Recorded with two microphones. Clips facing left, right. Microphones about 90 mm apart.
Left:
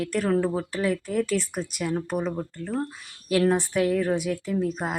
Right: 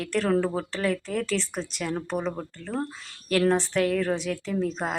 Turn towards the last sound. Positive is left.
turn(degrees=5)  # may be behind; listen again after turning